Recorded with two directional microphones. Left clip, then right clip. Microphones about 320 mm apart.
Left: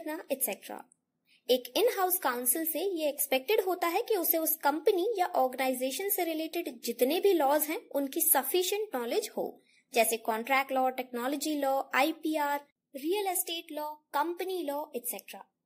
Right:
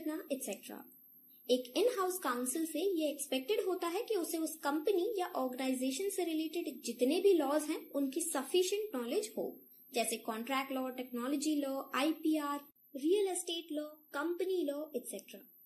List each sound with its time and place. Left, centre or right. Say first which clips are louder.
0.0 s a woman's voice: left 5 dB; left